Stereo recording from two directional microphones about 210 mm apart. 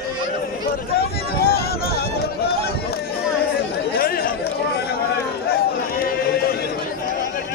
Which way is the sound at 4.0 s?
45° left (ahead or behind).